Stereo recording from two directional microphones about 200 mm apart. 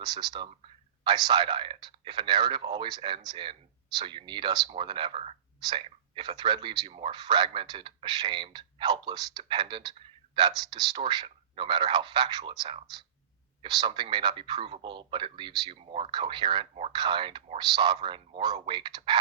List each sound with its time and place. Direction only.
0.0 s speech: 20° right (ahead or behind)